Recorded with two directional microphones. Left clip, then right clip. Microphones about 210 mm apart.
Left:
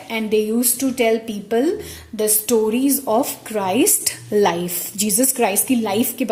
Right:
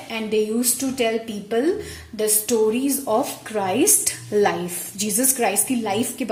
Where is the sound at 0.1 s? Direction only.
35° left (ahead or behind).